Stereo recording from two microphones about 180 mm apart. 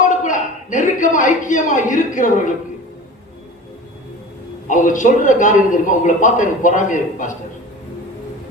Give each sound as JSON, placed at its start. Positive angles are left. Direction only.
{"t": 0.0, "sound": "a sound", "side_deg": 45}
{"t": 2.1, "sound": "a man's voice", "side_deg": 45}
{"t": 4.7, "sound": "a man's voice", "side_deg": 45}